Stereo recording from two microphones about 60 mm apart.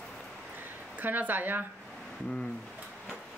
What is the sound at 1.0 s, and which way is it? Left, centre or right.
Speech, right.